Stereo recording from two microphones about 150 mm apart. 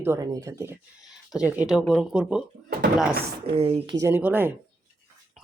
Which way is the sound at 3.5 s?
40° right (ahead or behind).